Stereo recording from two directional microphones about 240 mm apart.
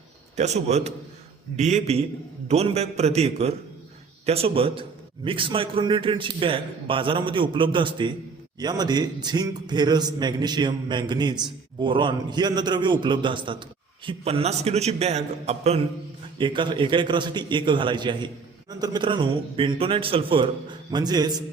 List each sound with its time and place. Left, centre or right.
0.3 s a man's voice: right